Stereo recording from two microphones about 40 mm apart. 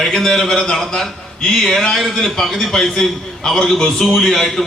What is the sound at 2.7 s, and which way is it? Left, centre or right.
A man's voice, centre.